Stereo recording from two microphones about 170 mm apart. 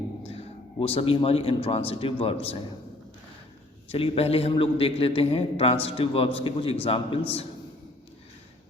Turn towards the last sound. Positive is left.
turn(degrees=35)  # may be behind; listen again after turning